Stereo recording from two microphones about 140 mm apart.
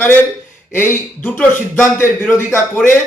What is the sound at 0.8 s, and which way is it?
A man's voice, 15° left (ahead or behind).